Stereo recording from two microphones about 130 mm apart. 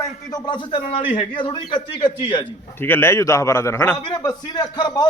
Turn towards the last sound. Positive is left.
turn(degrees=35)  # may be behind; listen again after turning